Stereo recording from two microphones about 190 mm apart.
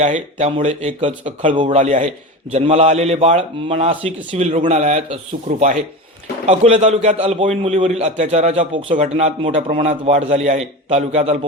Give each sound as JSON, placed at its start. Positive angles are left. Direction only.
{"t": 0.0, "sound": "a man's voice", "side_deg": -35}